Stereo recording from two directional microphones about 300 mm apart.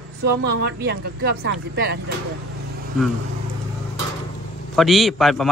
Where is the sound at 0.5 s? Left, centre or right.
Right.